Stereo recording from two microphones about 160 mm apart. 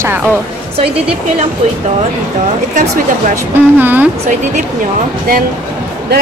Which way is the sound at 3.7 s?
10° right (ahead or behind).